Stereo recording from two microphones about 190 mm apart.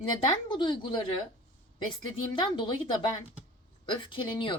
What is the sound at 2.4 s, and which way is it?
A woman's voice, 25° left (ahead or behind).